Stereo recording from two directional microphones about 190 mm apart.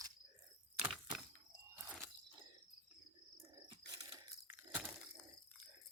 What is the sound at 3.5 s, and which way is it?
Chewing, 20° right (ahead or behind).